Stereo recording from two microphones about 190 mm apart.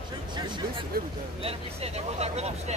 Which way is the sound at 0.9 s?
50° right (ahead or behind).